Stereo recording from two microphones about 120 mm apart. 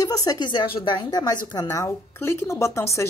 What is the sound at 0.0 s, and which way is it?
A woman's voice, 30° left (ahead or behind).